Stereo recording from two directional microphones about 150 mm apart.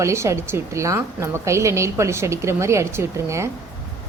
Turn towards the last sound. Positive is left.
turn(degrees=-20)  # may be behind; listen again after turning